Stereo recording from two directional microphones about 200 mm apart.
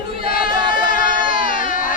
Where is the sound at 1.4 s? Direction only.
40° left (ahead or behind).